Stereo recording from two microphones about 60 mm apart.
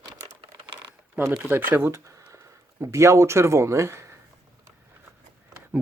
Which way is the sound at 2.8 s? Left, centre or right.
Right.